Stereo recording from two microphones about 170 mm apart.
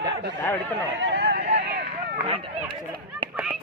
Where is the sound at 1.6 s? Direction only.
80° right.